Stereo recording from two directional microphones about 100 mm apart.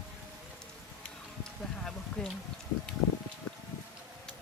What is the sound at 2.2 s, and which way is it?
Speech, 5° left (ahead or behind).